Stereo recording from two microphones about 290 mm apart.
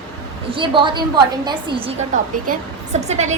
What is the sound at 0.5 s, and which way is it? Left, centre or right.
A woman's voice, centre.